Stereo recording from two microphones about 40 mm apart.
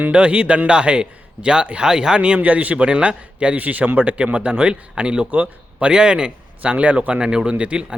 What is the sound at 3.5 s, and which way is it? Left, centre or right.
A man's voice, right.